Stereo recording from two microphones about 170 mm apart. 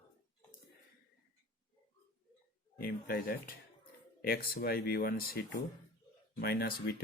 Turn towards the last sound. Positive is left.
turn(degrees=65)  # may be behind; listen again after turning